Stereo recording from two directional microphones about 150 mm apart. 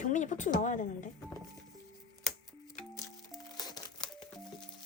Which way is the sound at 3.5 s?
25° left (ahead or behind).